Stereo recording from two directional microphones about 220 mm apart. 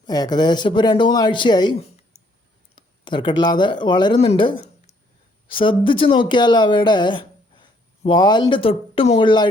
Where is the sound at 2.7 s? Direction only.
20° left (ahead or behind).